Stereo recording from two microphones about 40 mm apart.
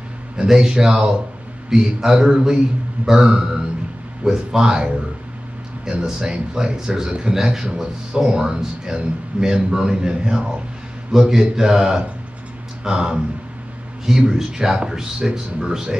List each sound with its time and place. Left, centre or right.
0.5 s a man's voice: centre